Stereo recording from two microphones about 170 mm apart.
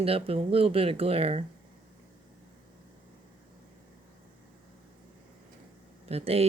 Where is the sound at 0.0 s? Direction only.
35° right (ahead or behind).